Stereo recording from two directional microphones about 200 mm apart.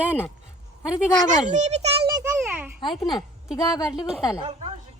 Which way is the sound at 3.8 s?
5° right (ahead or behind).